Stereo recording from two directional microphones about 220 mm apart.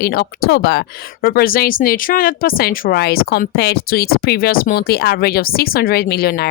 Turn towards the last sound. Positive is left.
turn(degrees=45)  # may be behind; listen again after turning